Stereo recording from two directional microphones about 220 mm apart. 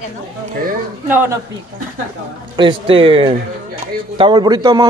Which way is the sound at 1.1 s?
10° right (ahead or behind).